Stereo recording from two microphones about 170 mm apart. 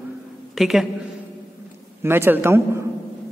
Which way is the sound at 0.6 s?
Centre (ahead or behind).